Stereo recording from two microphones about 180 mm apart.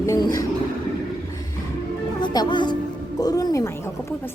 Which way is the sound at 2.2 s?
25° left (ahead or behind).